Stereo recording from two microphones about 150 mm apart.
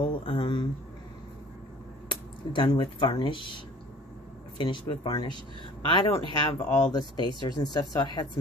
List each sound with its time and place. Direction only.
0.0 s speech: 35° left (ahead or behind)
2.0 s speech: 35° left (ahead or behind)